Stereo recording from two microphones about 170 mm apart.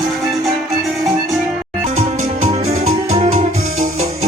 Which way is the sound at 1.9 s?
40° right (ahead or behind).